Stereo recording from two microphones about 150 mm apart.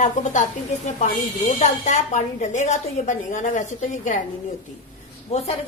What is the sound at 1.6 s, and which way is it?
A woman's voice, 50° left (ahead or behind).